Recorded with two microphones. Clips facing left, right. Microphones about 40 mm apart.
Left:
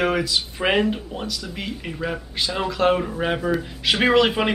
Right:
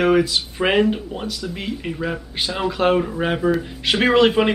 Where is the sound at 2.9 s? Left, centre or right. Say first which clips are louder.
Right 3 dB; centre.